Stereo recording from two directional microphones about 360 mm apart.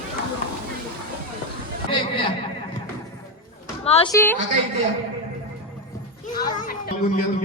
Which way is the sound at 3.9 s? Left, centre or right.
Centre.